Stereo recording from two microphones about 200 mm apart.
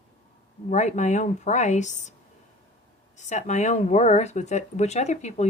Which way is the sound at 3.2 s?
35° left (ahead or behind).